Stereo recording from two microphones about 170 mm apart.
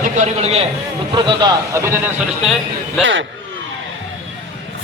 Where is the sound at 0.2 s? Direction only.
40° right (ahead or behind).